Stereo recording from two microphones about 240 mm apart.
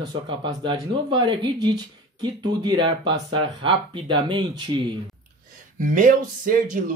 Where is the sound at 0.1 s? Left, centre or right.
Centre.